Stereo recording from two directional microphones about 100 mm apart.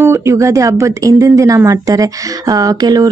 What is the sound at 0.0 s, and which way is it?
A woman's voice, 25° right (ahead or behind).